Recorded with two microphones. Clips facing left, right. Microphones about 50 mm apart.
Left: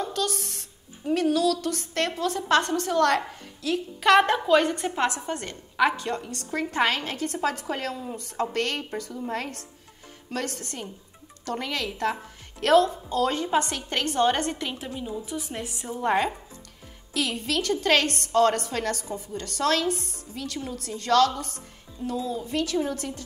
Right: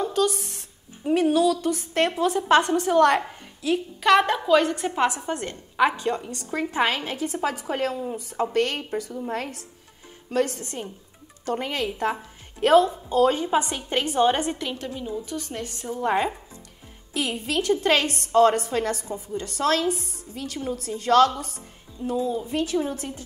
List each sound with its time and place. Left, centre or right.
0.0 s a woman's voice: centre
4.0 s a woman's voice: centre
5.0 s a woman's voice: centre
14.6 s a woman's voice: centre
17.1 s a woman's voice: right
20.0 s a woman's voice: left
21.0 s a woman's voice: centre